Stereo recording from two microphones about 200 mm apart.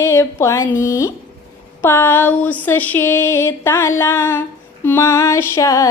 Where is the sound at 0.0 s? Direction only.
15° left (ahead or behind).